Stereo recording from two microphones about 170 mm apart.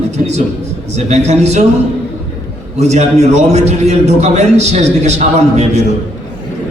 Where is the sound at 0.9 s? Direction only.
40° right (ahead or behind).